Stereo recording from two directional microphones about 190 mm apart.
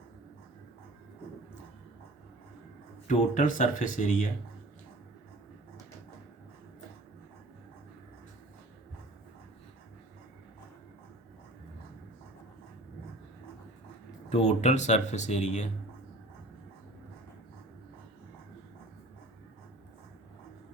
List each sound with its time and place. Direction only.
3.1 s speech: 40° left (ahead or behind)
14.3 s speech: 35° left (ahead or behind)